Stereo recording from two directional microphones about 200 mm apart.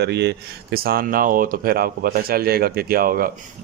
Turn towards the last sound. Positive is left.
turn(degrees=-45)  # may be behind; listen again after turning